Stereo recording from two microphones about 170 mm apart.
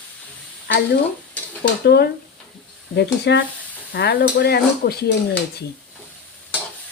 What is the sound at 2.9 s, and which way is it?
Speech, 85° left.